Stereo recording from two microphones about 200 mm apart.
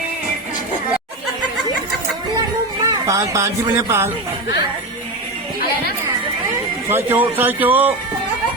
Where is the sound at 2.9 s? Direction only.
15° right (ahead or behind).